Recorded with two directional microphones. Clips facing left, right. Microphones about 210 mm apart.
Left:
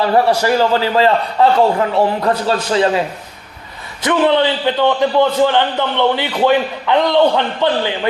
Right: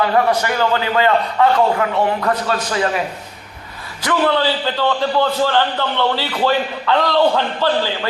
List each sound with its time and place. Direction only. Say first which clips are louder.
0.0 s a man's voice: left 3 dB; 30° left (ahead or behind)
4.0 s a man's voice: left 3 dB; 20° left (ahead or behind)